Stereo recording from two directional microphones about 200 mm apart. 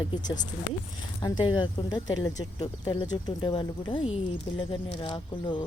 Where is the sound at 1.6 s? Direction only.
20° left (ahead or behind).